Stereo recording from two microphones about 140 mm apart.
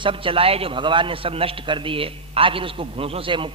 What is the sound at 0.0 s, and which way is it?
A man's voice, 40° right (ahead or behind).